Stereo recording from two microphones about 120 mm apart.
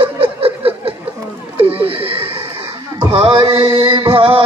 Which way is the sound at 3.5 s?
50° right (ahead or behind).